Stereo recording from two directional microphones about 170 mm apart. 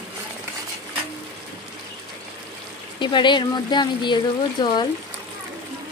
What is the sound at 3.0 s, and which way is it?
Speech, 25° left (ahead or behind).